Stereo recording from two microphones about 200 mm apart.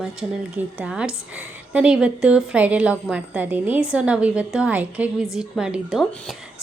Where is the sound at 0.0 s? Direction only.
5° right (ahead or behind).